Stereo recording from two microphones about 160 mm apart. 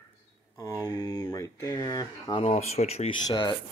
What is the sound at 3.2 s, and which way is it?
Speech, 30° left (ahead or behind).